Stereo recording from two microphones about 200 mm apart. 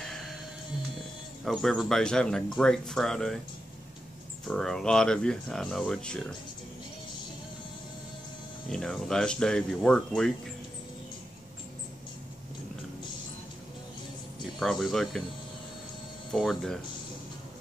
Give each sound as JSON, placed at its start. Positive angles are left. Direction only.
{"t": 0.0, "sound": "music", "side_deg": 0}
{"t": 0.9, "sound": "speech", "side_deg": 0}
{"t": 4.5, "sound": "speech", "side_deg": 0}
{"t": 8.6, "sound": "speech", "side_deg": 5}
{"t": 14.4, "sound": "speech", "side_deg": 0}
{"t": 16.3, "sound": "speech", "side_deg": 0}